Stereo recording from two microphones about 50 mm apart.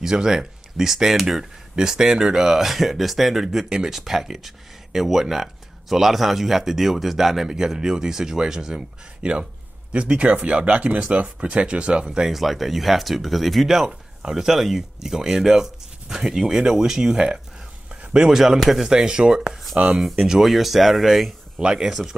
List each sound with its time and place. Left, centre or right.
0.0 s speech: centre
9.2 s speech: right
12.3 s speech: centre
18.9 s speech: centre
21.5 s speech: centre